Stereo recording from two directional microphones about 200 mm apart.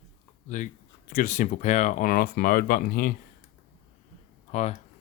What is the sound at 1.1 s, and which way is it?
Speech, 40° left (ahead or behind).